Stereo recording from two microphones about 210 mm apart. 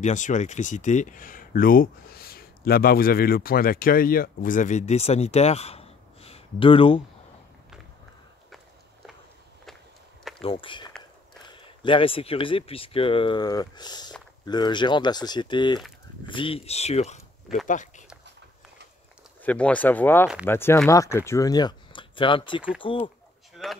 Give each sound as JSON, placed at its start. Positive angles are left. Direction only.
{"t": 0.0, "sound": "speech", "side_deg": 35}
{"t": 10.4, "sound": "speech", "side_deg": 25}
{"t": 19.4, "sound": "speech", "side_deg": 5}
{"t": 23.5, "sound": "a sound", "side_deg": 0}